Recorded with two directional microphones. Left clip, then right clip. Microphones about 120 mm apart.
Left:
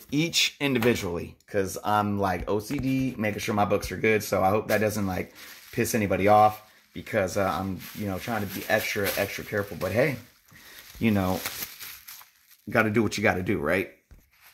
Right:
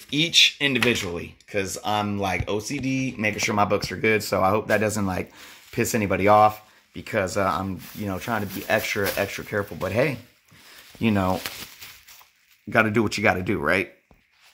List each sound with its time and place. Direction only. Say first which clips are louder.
0.1 s speech: right 7 dB; 25° left (ahead or behind); by 11.3 s 5° right (ahead or behind)
12.6 s speech: right 3 dB; 5° right (ahead or behind)